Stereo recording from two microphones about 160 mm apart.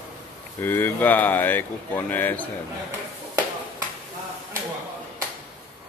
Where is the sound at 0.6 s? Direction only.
10° left (ahead or behind).